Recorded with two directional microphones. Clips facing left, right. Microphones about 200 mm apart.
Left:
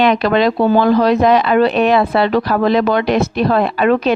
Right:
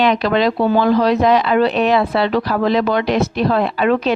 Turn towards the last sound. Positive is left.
turn(degrees=55)  # may be behind; listen again after turning